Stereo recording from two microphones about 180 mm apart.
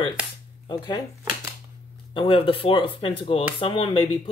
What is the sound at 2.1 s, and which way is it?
Speech, 30° left (ahead or behind).